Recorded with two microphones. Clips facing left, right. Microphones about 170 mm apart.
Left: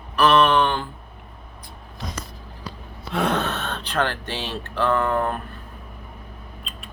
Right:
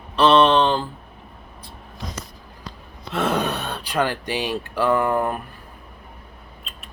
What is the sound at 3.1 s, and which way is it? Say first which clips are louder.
Gasp: even; 5° right (ahead or behind).